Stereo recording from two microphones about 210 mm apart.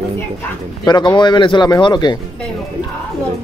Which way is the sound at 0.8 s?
20° left (ahead or behind).